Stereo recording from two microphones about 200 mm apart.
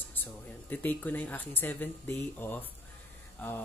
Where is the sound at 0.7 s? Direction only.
10° left (ahead or behind).